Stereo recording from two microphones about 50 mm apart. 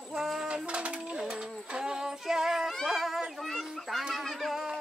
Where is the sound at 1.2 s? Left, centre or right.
Centre.